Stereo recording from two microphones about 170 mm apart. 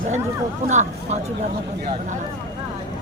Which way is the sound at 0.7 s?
45° right (ahead or behind).